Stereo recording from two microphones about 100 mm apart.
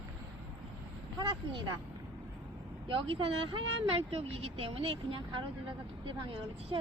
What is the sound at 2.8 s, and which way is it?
Speech, 60° right (ahead or behind).